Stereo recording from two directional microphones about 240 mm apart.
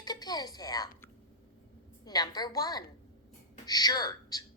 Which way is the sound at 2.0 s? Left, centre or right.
Centre.